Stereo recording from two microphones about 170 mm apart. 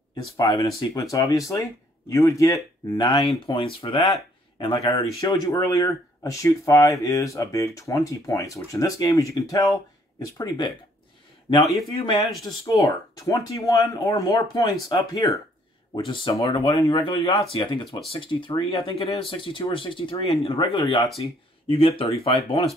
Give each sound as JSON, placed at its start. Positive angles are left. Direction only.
{"t": 0.1, "sound": "speech", "side_deg": 25}
{"t": 11.9, "sound": "speech", "side_deg": 30}